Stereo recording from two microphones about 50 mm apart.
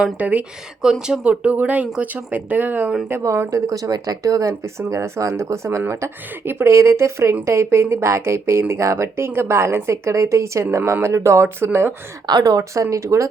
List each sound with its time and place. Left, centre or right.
0.2 s speech: right
0.8 s speech: centre
1.2 s speech: right
3.5 s speech: right
4.9 s speech: right
6.4 s speech: right
11.4 s speech: right
12.4 s speech: right